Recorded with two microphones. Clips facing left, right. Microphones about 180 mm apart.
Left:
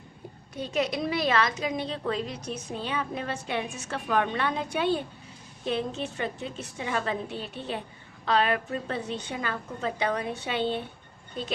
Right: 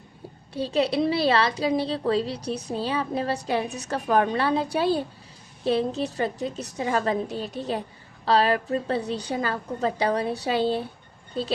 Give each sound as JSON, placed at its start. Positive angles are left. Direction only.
{"t": 0.5, "sound": "a woman's voice", "side_deg": -30}